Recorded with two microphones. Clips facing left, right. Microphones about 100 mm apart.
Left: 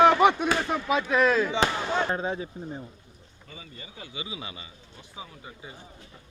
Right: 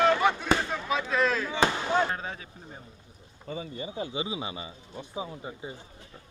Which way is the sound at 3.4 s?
35° right (ahead or behind).